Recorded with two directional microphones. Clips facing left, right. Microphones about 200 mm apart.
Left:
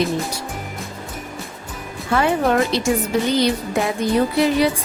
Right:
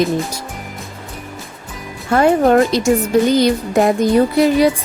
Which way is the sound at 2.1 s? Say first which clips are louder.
Right 6 dB; 45° right (ahead or behind).